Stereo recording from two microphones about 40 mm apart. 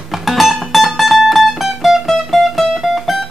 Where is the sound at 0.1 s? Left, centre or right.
Centre.